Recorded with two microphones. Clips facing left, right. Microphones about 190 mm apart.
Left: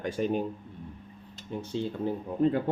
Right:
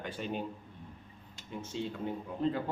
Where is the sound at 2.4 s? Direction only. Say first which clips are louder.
Left 7 dB; 50° left (ahead or behind).